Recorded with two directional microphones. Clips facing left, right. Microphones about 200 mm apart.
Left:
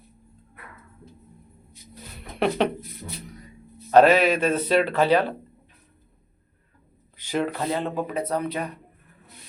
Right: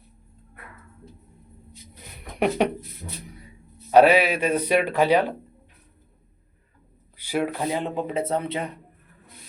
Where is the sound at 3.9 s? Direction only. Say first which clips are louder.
Even; 10° right (ahead or behind).